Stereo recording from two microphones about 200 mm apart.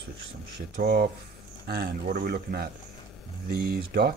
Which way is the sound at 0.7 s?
55° right (ahead or behind).